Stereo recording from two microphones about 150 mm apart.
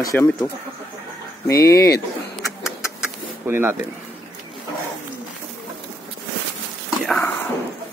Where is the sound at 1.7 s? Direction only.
20° left (ahead or behind).